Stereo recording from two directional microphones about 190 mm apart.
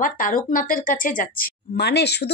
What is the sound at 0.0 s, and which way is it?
A woman's voice, 45° left (ahead or behind).